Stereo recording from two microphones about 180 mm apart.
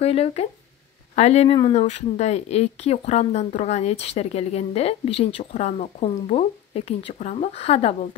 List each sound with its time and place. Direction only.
0.0 s speech: 35° left (ahead or behind)